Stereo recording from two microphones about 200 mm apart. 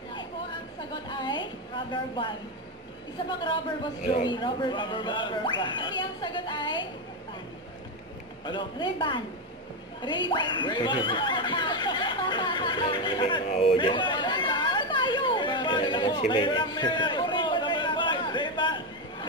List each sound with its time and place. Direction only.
1.0 s speech: 25° left (ahead or behind)
4.1 s speech: 25° left (ahead or behind)
8.5 s speech: 25° left (ahead or behind)
10.0 s a sound: 25° left (ahead or behind)